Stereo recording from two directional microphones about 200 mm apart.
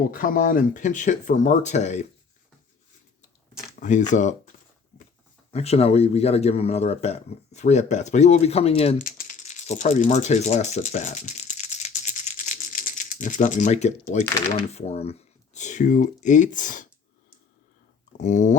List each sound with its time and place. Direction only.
0.1 s speech: 45° left (ahead or behind)
3.8 s speech: 35° left (ahead or behind)
5.5 s speech: 30° left (ahead or behind)
9.0 s speech: 40° left (ahead or behind)
18.2 s speech: 40° left (ahead or behind)